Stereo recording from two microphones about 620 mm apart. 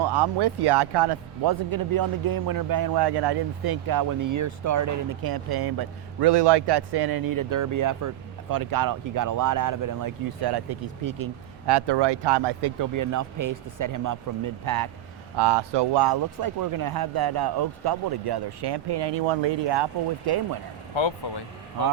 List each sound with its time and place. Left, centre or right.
0.0 s speech: right
20.9 s speech: left